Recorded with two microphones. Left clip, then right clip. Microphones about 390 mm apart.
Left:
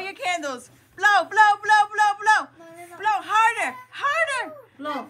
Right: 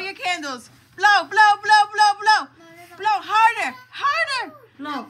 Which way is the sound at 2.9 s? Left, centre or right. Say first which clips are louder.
Right 2 dB; centre.